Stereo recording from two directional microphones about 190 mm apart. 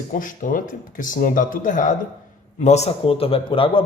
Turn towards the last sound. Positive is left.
turn(degrees=30)  # may be behind; listen again after turning